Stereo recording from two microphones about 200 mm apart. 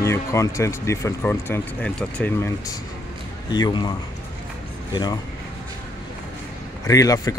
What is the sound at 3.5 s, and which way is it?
Speech, 20° left (ahead or behind).